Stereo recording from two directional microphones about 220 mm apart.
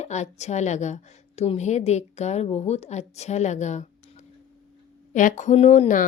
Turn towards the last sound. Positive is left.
turn(degrees=35)  # may be behind; listen again after turning